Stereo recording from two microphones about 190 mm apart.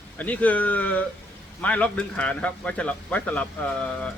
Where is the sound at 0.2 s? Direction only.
10° left (ahead or behind).